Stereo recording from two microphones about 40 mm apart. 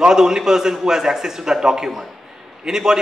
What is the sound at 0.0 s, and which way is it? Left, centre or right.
A man's voice, centre.